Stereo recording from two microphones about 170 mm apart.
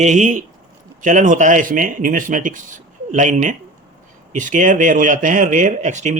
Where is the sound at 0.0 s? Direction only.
45° right (ahead or behind).